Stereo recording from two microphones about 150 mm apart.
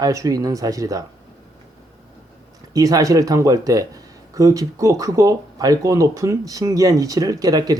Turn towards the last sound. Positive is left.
turn(degrees=-25)  # may be behind; listen again after turning